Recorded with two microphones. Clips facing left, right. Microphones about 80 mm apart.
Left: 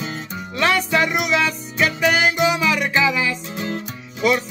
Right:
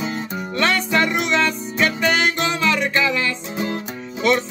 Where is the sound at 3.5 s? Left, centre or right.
Centre.